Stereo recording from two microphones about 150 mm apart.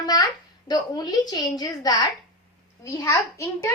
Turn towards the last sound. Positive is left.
turn(degrees=20)  # may be behind; listen again after turning